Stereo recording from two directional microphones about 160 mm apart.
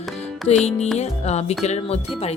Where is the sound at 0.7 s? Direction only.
45° left (ahead or behind).